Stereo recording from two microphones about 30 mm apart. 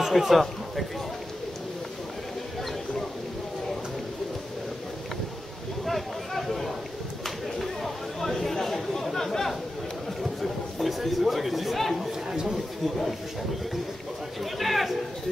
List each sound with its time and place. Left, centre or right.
0.0 s a man's voice: centre
5.9 s a sound: centre
10.4 s a sound: centre
12.0 s chatter: centre
12.5 s speech: centre
14.4 s speech: centre